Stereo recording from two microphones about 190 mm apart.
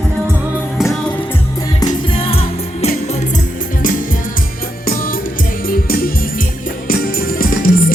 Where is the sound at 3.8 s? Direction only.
45° left (ahead or behind).